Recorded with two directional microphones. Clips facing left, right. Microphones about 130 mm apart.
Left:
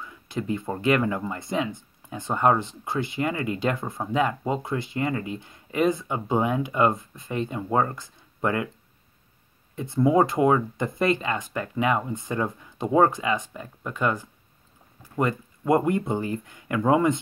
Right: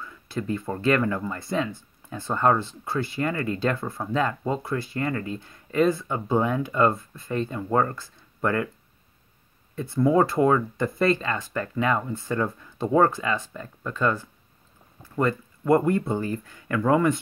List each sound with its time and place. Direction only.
0.0 s speech: 15° left (ahead or behind)
9.8 s speech: 20° left (ahead or behind)